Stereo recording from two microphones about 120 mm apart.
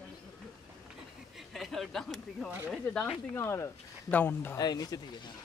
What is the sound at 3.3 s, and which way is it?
Speech, 20° left (ahead or behind).